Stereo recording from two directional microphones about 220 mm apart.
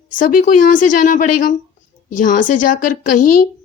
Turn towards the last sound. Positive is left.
turn(degrees=35)  # may be behind; listen again after turning